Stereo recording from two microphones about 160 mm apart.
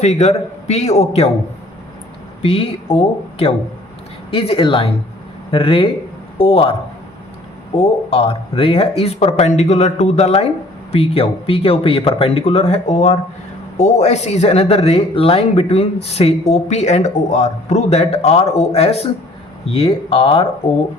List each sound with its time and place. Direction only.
0.0 s a man's voice: 45° left (ahead or behind)
2.4 s speech: 35° left (ahead or behind)
7.8 s speech: 35° left (ahead or behind)